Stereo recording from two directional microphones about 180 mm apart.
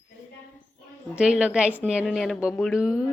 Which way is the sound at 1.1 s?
5° right (ahead or behind).